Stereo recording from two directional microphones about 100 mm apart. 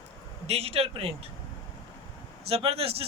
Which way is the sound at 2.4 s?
75° right (ahead or behind).